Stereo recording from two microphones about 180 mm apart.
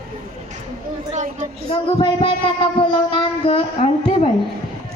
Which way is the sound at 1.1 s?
45° right (ahead or behind).